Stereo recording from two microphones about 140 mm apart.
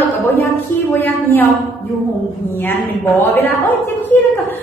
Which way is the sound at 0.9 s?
15° left (ahead or behind).